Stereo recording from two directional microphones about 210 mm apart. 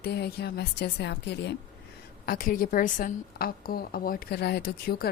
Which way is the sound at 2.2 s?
40° left (ahead or behind).